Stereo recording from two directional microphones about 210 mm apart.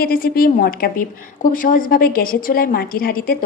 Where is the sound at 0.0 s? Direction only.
45° left (ahead or behind).